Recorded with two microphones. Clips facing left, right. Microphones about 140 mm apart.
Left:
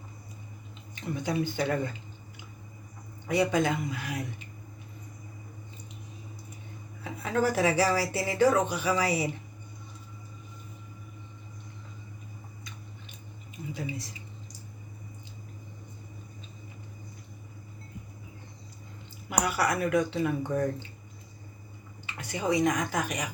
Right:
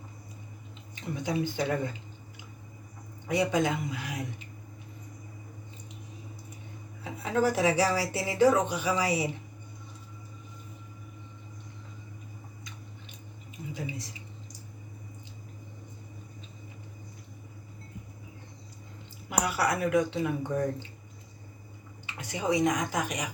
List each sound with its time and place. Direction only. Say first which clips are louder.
1.2 s speech: even; 20° right (ahead or behind)
3.2 s speech: left 1 dB; 20° right (ahead or behind)
7.0 s speech: right 1 dB; 25° right (ahead or behind)
13.7 s speech: left 1 dB; 20° right (ahead or behind)
19.3 s speech: left 1 dB; 25° right (ahead or behind)
22.0 s speech: even; 20° right (ahead or behind)